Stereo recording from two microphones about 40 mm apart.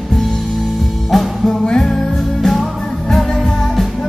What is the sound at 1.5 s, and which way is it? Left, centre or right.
Music, centre.